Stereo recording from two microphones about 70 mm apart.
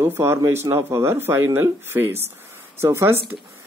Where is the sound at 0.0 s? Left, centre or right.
Right.